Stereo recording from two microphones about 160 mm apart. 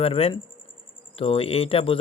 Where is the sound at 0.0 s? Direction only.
35° left (ahead or behind).